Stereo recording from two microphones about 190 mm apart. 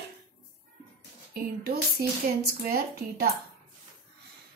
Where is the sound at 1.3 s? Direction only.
55° right (ahead or behind).